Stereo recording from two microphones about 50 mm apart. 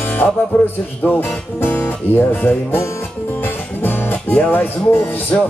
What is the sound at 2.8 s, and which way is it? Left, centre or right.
Speech, left.